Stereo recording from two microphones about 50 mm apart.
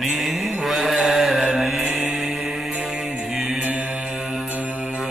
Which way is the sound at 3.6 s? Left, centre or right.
Right.